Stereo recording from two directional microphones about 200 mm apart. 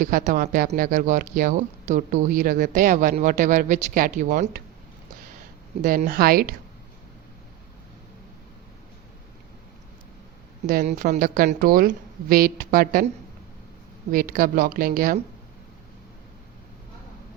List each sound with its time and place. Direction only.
0.0 s speech: 40° right (ahead or behind)
5.8 s a woman's voice: 45° right (ahead or behind)
10.7 s a woman's voice: 40° right (ahead or behind)
14.1 s a woman's voice: 45° right (ahead or behind)